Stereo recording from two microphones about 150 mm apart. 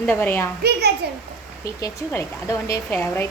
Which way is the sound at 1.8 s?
20° left (ahead or behind).